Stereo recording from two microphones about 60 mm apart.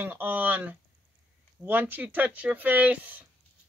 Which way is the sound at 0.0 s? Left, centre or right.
Right.